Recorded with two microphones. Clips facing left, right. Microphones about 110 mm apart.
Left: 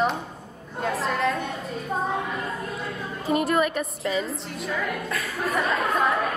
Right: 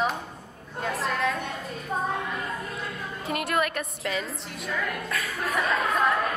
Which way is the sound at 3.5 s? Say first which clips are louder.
Left 4 dB; centre (ahead or behind).